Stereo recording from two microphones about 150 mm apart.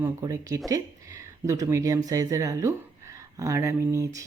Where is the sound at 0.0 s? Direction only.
20° right (ahead or behind).